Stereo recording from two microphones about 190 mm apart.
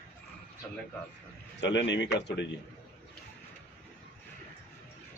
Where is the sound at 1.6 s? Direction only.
65° left (ahead or behind).